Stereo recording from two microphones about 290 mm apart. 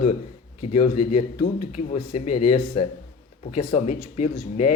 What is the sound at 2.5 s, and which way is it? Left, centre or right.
Speech, left.